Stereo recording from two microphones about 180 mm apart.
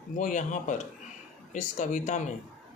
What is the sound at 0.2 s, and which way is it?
Speech, 45° left (ahead or behind).